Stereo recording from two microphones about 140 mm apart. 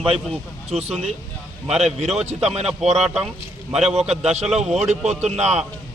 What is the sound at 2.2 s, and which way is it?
Speech, 50° right (ahead or behind).